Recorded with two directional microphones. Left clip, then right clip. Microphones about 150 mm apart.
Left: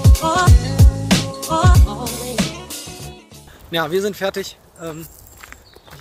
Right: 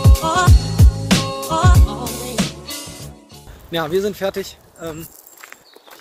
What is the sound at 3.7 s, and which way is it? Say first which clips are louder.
Speech: even; 15° right (ahead or behind).